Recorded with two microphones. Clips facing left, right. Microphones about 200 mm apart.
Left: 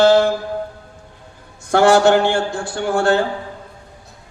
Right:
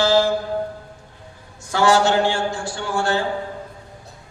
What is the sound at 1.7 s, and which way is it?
Mantra, 60° left (ahead or behind).